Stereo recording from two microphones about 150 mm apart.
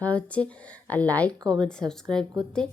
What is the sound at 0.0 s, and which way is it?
Speech, 10° left (ahead or behind).